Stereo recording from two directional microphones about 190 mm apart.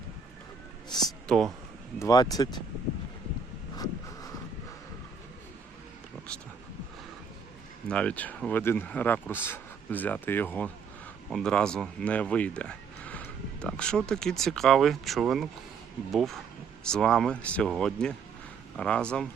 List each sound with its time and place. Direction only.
1.3 s speech: 5° left (ahead or behind)
2.0 s speech: 20° left (ahead or behind)
7.9 s speech: 5° left (ahead or behind)